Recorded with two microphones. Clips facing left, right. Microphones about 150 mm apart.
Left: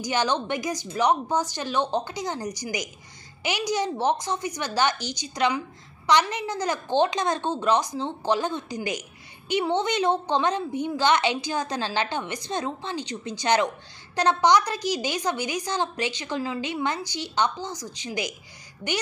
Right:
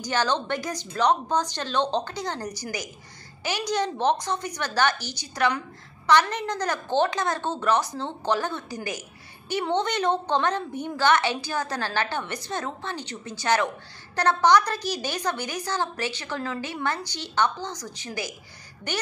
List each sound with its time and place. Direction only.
0.0 s a woman's voice: 15° left (ahead or behind)